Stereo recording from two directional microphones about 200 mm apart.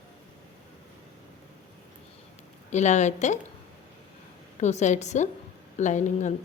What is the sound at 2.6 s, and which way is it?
Speech, 35° left (ahead or behind).